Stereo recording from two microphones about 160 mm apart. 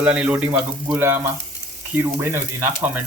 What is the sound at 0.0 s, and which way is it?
Speech, 5° right (ahead or behind).